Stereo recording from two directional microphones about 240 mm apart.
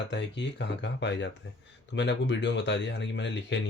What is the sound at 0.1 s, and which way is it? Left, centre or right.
Speech, left.